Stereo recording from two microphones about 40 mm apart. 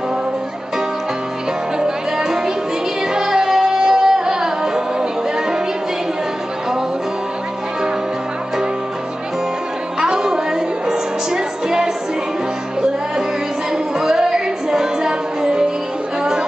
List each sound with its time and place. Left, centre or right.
1.8 s music: centre
9.9 s music: centre
13.9 s music: centre